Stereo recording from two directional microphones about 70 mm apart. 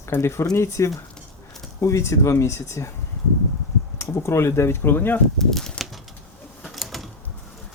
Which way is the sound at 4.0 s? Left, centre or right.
Left.